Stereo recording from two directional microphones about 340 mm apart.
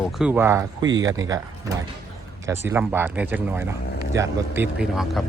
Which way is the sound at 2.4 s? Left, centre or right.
Centre.